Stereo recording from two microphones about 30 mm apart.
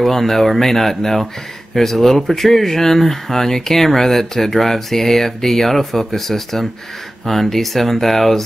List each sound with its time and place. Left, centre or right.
0.0 s speech: centre